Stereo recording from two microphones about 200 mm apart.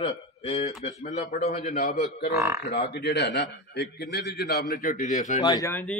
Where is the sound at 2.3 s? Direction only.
15° right (ahead or behind).